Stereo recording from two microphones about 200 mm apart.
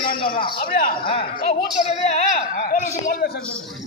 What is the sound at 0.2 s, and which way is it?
A man's voice, 25° left (ahead or behind).